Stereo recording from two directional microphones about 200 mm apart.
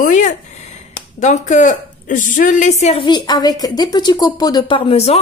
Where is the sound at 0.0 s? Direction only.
40° left (ahead or behind).